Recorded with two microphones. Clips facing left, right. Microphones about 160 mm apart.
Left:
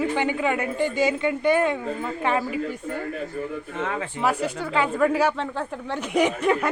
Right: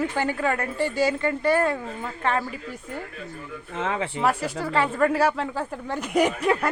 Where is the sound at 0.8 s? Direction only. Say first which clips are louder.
Even; 35° right (ahead or behind).